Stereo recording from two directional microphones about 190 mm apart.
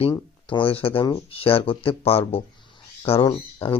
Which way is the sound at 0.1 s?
25° left (ahead or behind).